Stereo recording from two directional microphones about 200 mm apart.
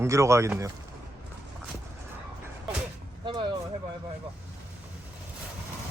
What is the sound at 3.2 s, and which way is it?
Vehicle, 25° right (ahead or behind).